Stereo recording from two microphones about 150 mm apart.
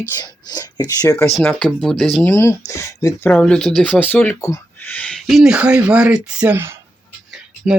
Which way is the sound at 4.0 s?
10° left (ahead or behind).